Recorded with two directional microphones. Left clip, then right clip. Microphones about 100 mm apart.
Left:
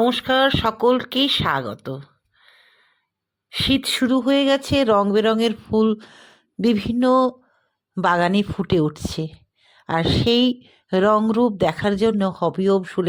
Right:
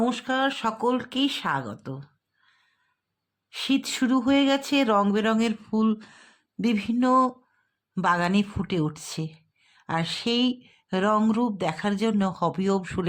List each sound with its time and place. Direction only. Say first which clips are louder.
0.0 s speech: left 8 dB; 40° left (ahead or behind)
3.5 s a woman's voice: left 7 dB; 35° left (ahead or behind)
12.3 s speech: left 6 dB; 20° left (ahead or behind)